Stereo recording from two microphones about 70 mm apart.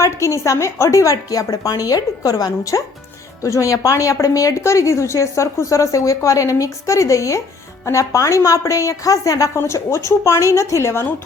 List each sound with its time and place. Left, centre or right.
0.0 s a woman's voice: left